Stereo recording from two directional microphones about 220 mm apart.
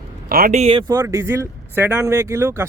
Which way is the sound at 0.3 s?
40° right (ahead or behind).